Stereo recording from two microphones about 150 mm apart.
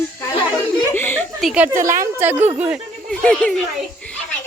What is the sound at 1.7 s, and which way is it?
Speech, 60° right (ahead or behind).